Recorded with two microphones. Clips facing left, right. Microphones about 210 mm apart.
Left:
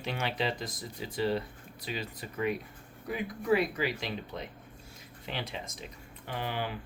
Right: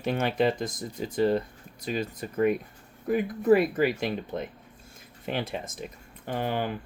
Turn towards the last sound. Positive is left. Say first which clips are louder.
# right 6 dB
turn(degrees=-50)  # may be behind; listen again after turning